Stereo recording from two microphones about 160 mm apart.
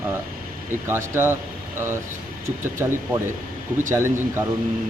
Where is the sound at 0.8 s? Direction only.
15° right (ahead or behind).